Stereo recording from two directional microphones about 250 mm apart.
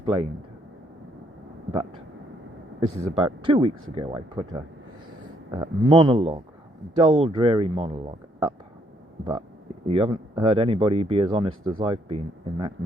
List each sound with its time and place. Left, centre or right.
0.0 s speech: right
3.0 s speech: right
9.8 s speech: right